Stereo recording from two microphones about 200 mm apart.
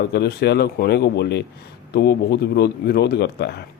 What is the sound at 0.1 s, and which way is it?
Speech, 55° left (ahead or behind).